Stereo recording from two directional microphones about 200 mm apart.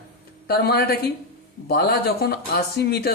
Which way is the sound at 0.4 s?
50° left (ahead or behind).